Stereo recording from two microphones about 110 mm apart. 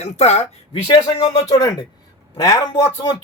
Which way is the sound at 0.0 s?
85° left.